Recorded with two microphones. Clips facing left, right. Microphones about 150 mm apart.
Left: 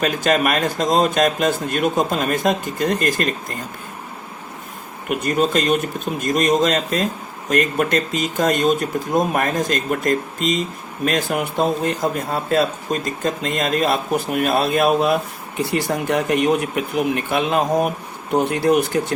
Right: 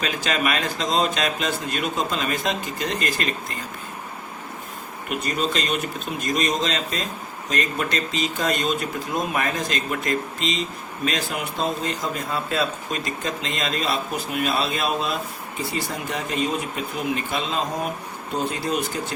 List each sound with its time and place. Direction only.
0.0 s speech: 50° left (ahead or behind)
5.0 s speech: 50° left (ahead or behind)